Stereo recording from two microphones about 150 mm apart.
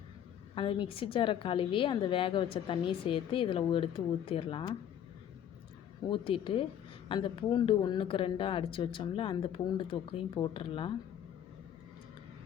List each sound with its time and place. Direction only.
0.5 s a woman's voice: 35° left (ahead or behind)
6.1 s a woman's voice: 35° left (ahead or behind)